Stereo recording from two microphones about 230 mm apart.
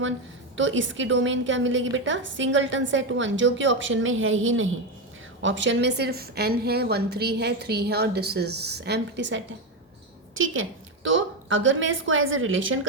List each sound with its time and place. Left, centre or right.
0.5 s a woman's voice: right